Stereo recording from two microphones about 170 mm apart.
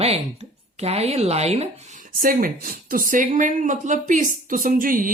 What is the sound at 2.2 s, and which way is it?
Speech, 55° right (ahead or behind).